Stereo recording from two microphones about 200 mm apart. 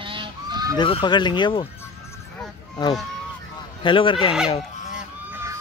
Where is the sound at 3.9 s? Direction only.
25° left (ahead or behind).